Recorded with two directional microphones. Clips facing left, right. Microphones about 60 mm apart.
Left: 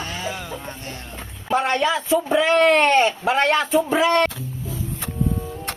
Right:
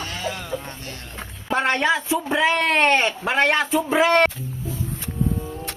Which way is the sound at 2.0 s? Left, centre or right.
Centre.